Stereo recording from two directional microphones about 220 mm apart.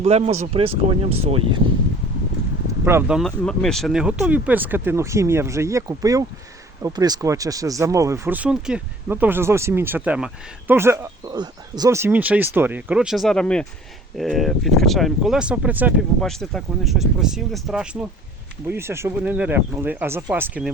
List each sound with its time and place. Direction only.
0.0 s speech: 30° right (ahead or behind)
2.8 s speech: 5° right (ahead or behind)